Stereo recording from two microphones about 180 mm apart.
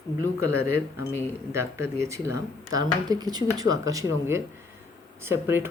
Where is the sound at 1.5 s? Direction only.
15° right (ahead or behind).